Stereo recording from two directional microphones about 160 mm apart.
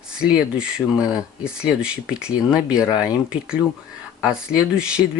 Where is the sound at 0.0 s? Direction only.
5° right (ahead or behind).